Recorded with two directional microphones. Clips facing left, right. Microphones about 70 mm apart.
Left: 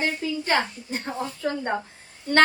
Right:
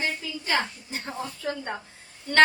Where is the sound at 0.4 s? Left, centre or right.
Left.